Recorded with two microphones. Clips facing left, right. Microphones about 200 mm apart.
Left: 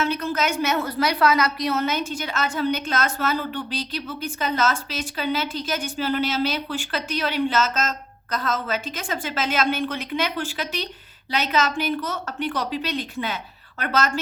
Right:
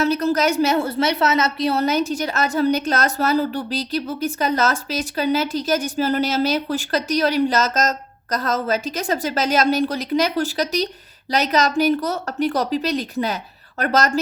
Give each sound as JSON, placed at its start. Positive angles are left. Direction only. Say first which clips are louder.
{"t": 0.0, "sound": "a woman's voice", "louder": "right 6 dB", "side_deg": -40}